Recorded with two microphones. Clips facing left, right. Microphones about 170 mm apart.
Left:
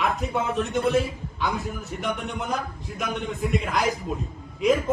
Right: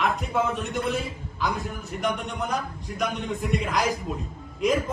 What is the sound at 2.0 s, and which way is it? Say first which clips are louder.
A man's voice: right 1 dB; centre (ahead or behind).